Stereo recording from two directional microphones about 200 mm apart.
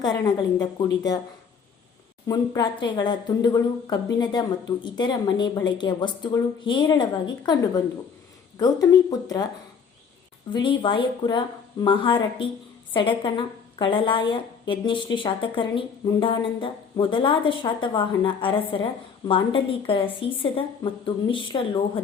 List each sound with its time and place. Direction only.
0.0 s a woman's voice: 20° left (ahead or behind)
2.2 s a woman's voice: 20° left (ahead or behind)
10.5 s a woman's voice: 25° left (ahead or behind)